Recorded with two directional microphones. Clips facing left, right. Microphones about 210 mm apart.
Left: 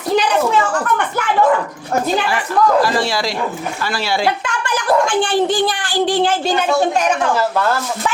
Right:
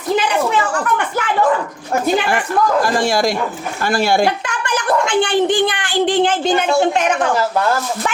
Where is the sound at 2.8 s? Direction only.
50° right (ahead or behind).